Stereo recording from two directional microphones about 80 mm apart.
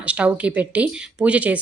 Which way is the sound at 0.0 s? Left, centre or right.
Centre.